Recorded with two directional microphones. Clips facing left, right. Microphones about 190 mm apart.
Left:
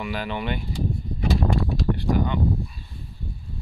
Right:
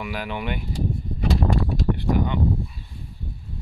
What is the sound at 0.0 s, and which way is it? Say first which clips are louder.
Speech: left 1 dB; 10° right (ahead or behind).